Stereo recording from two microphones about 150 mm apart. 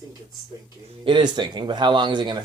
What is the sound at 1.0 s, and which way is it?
Speech, 30° right (ahead or behind).